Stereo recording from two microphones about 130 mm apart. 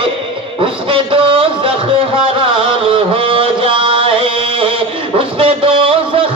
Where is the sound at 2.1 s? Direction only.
45° right (ahead or behind).